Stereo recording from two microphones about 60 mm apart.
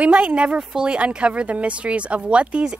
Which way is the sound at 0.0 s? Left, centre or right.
Right.